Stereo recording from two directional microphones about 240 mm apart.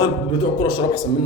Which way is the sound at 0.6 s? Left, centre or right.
Centre.